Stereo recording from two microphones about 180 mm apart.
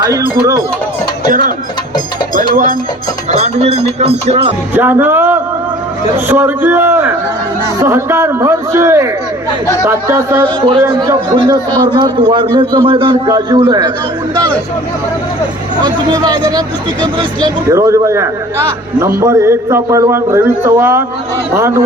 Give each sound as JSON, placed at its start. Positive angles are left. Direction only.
{"t": 0.0, "sound": "a man's voice", "side_deg": -20}
{"t": 1.3, "sound": "speech", "side_deg": -50}
{"t": 3.3, "sound": "a sound", "side_deg": -35}
{"t": 4.0, "sound": "music", "side_deg": -35}
{"t": 4.7, "sound": "a man's voice", "side_deg": -10}
{"t": 15.8, "sound": "a man's voice", "side_deg": -20}